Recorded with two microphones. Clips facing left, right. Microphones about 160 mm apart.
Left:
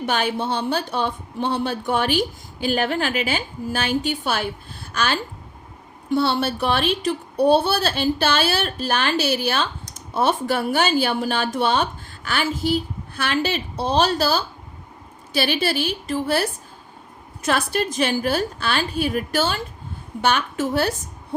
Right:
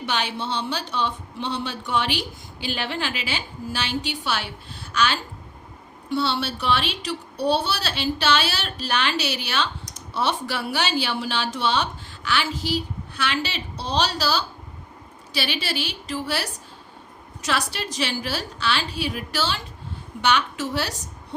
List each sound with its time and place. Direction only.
0.0 s speech: 50° left (ahead or behind)